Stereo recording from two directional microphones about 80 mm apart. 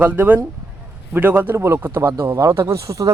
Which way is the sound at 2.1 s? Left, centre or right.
Right.